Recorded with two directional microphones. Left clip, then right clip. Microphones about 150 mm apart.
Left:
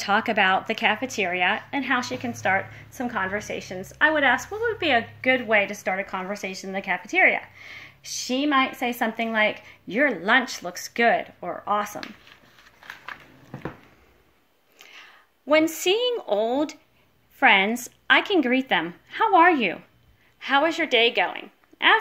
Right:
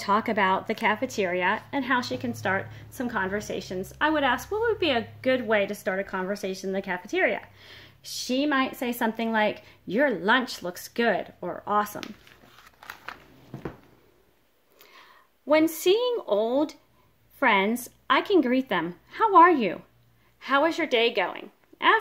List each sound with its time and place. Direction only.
0.0 s speech: 45° right (ahead or behind)
3.3 s speech: 65° right (ahead or behind)
3.8 s speech: 45° right (ahead or behind)
8.3 s speech: 55° right (ahead or behind)
15.0 s a woman's voice: 45° right (ahead or behind)